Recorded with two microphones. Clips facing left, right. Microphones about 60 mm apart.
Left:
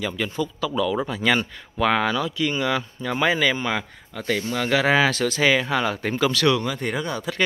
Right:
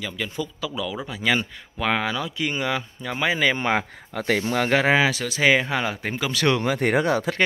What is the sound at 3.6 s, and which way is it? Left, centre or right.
Speech, right.